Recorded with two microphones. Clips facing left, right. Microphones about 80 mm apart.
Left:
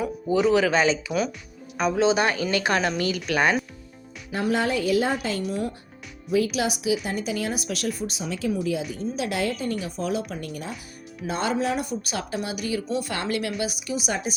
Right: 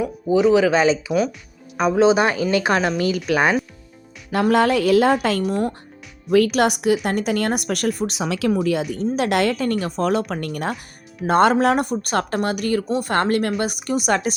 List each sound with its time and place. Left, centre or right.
0.0 s speech: centre
4.3 s a woman's voice: right